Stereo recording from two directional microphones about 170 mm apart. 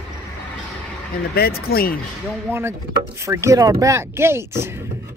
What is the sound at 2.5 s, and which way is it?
Speech, 15° right (ahead or behind).